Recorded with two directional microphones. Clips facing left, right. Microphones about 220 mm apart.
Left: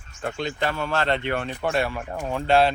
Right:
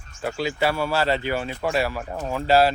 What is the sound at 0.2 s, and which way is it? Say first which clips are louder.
Speech: right 3 dB; 5° right (ahead or behind).